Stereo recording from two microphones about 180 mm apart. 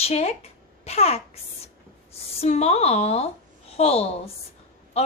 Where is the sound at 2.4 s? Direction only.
35° left (ahead or behind).